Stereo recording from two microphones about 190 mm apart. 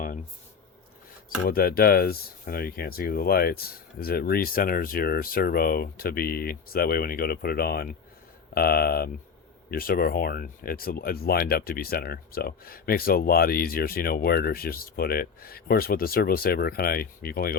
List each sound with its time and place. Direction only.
1.5 s speech: 50° left (ahead or behind)